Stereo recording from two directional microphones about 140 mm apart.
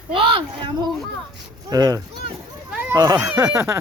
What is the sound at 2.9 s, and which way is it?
Speech, 25° right (ahead or behind).